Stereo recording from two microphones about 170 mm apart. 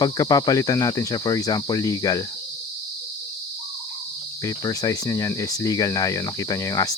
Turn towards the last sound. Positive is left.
turn(degrees=20)  # may be behind; listen again after turning